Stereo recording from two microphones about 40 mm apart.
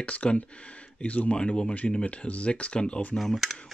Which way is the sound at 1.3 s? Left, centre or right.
Left.